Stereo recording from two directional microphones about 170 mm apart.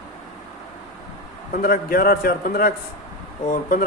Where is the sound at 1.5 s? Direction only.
60° left (ahead or behind).